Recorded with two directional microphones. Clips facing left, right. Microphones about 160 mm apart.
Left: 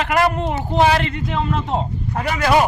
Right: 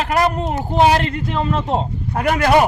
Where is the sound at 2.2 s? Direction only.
55° right (ahead or behind).